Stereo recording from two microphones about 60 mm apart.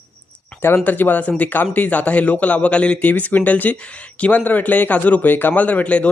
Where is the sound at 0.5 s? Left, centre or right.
Centre.